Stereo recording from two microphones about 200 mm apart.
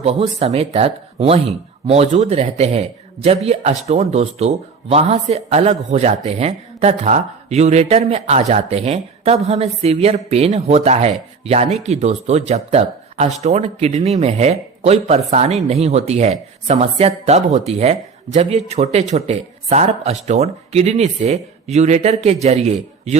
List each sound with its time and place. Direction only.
0.0 s speech: 30° right (ahead or behind)